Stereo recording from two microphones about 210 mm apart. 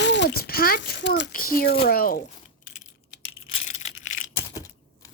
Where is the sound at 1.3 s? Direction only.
45° left (ahead or behind).